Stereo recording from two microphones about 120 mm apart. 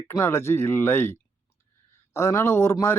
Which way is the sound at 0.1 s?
20° left (ahead or behind).